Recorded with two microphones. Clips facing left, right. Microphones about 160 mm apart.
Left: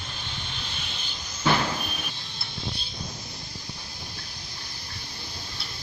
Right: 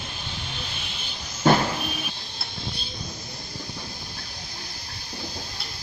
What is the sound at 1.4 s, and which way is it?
Vehicle, 45° right (ahead or behind).